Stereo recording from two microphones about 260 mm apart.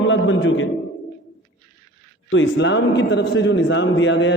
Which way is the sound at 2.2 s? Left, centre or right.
Left.